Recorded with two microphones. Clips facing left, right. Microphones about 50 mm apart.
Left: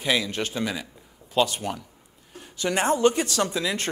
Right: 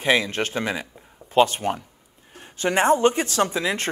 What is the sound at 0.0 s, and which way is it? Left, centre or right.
Speech, right.